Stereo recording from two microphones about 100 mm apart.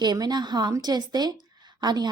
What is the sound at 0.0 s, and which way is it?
Speech, 45° right (ahead or behind).